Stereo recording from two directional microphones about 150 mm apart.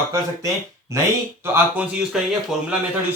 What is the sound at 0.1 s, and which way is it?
Speech, 20° right (ahead or behind).